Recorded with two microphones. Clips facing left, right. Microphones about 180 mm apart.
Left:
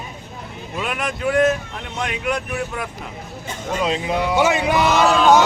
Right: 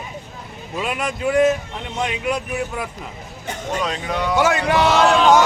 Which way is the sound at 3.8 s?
20° left (ahead or behind).